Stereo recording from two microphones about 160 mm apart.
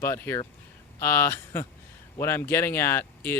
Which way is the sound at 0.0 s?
15° left (ahead or behind).